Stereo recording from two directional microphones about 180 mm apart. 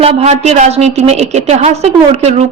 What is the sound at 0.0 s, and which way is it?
A woman's voice, 35° right (ahead or behind).